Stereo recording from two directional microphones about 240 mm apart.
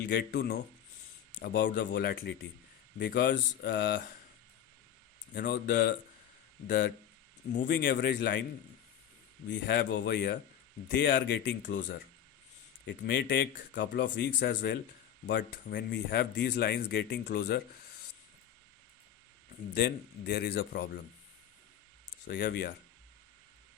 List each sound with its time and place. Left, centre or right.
0.1 s speech: left
5.3 s speech: left
7.5 s speech: left
7.8 s speech: left
9.6 s speech: left
11.6 s speech: left
12.8 s speech: left
19.7 s speech: left
22.3 s speech: left